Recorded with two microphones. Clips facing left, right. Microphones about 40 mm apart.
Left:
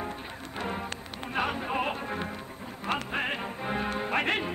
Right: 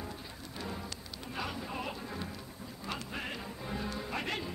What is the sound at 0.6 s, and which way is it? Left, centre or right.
Music, left.